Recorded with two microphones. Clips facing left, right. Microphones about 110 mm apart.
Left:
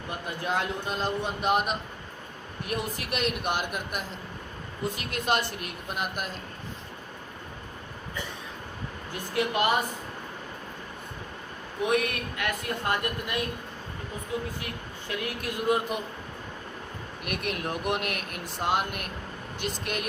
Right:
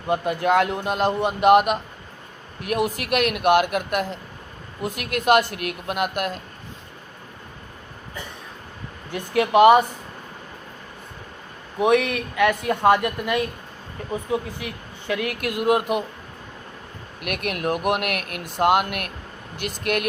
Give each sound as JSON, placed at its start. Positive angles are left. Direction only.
{"t": 0.1, "sound": "speech", "side_deg": -75}
{"t": 2.7, "sound": "speech", "side_deg": -65}
{"t": 5.1, "sound": "speech", "side_deg": -70}
{"t": 9.1, "sound": "speech", "side_deg": -75}
{"t": 11.8, "sound": "speech", "side_deg": -90}
{"t": 14.6, "sound": "speech", "side_deg": -90}
{"t": 17.2, "sound": "speech", "side_deg": -70}